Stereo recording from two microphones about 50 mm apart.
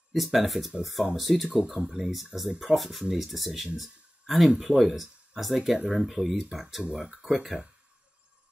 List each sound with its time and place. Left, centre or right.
0.1 s speech: centre
1.5 s speech: centre
3.7 s a sound: centre
4.6 s speech: centre